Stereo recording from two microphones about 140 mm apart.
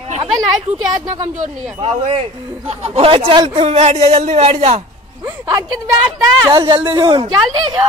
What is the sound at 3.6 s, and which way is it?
Speech, 50° right (ahead or behind).